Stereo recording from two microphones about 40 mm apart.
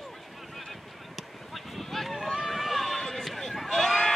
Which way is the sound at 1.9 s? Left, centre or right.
Centre.